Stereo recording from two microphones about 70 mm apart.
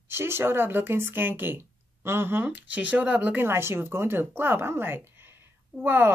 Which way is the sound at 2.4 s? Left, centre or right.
Right.